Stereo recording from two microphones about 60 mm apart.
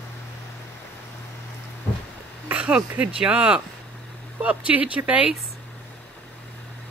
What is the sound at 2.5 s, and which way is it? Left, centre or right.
Speech, right.